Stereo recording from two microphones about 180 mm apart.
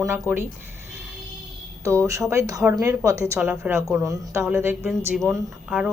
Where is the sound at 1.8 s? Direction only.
15° right (ahead or behind).